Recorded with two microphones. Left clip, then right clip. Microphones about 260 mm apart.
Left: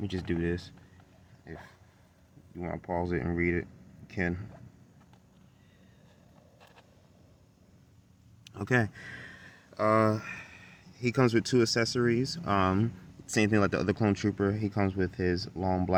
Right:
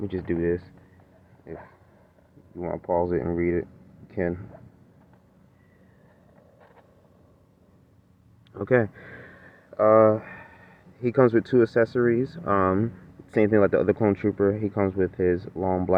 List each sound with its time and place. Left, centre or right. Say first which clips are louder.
0.0 s speech: right 6 dB; left
2.6 s speech: right 8 dB; left
8.5 s a sound: right 7 dB; left
11.9 s speech: right 6 dB; left